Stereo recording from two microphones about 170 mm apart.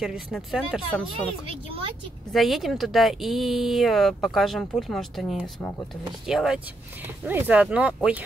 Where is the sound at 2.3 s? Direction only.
Centre (ahead or behind).